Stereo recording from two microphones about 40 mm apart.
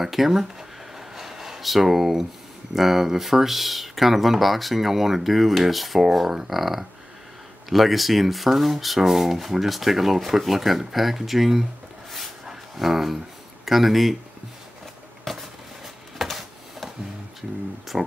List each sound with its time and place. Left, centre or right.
0.0 s a sound: centre
2.7 s speech: centre
12.4 s dog: centre
13.7 s speech: centre
15.3 s a sound: centre
17.4 s speech: centre